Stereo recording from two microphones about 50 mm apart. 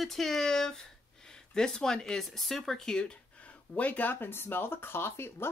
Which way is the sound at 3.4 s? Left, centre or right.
Left.